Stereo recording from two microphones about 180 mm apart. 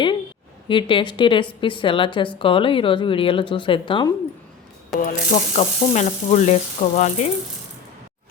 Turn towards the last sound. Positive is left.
turn(degrees=40)  # may be behind; listen again after turning